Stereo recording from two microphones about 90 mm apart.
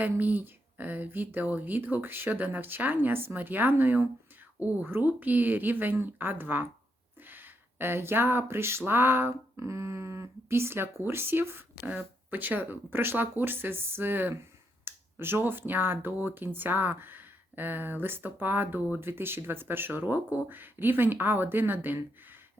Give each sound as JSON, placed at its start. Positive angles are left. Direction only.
{"t": 0.0, "sound": "speech", "side_deg": -20}